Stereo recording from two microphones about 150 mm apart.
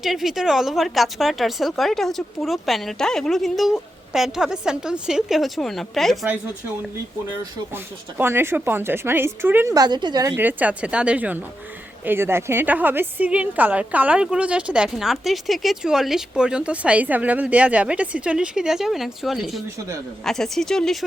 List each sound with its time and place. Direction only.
0.0 s a woman's voice: centre (ahead or behind)
8.2 s a woman's voice: 15° right (ahead or behind)
9.7 s a woman's voice: 25° right (ahead or behind)
10.3 s a woman's voice: 10° right (ahead or behind)